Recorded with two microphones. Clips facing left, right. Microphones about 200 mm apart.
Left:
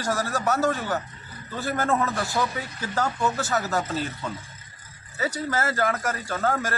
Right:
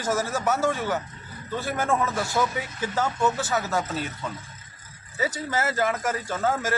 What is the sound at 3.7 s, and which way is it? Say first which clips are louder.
Speech: even; centre (ahead or behind).